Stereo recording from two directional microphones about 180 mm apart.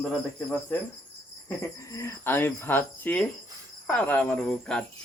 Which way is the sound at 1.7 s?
15° left (ahead or behind).